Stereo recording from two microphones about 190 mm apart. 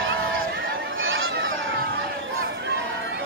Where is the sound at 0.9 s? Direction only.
90° right.